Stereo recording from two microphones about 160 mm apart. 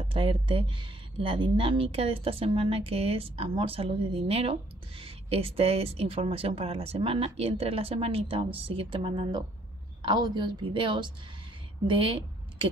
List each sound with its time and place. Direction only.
0.0 s a woman's voice: 35° right (ahead or behind)